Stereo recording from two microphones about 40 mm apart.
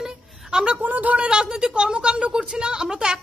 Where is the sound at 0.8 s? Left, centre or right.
Right.